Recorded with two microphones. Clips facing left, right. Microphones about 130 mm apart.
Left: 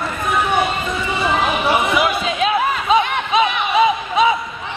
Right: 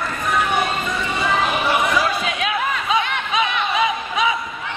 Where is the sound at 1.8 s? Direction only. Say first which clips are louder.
Left 2 dB; 25° left (ahead or behind).